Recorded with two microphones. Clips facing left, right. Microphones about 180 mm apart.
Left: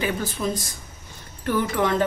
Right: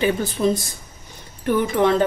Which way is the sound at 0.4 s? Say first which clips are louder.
Right 7 dB; 30° right (ahead or behind).